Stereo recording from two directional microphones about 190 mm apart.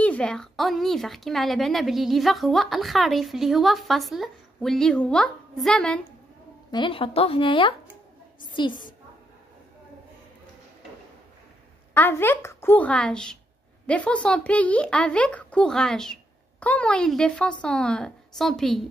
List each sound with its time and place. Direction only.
0.0 s speech: 5° left (ahead or behind)
6.7 s speech: 25° left (ahead or behind)
11.9 s speech: 10° left (ahead or behind)